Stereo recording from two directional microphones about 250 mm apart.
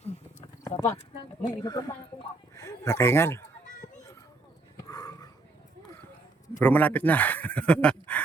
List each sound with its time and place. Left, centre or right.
0.6 s clip-clop: centre
1.6 s speech: centre
4.9 s dog: centre
6.6 s speech: centre